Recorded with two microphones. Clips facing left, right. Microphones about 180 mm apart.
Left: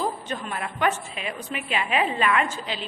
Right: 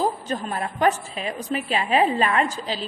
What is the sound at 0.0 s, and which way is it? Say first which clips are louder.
A woman's voice: right 4 dB; 40° right (ahead or behind).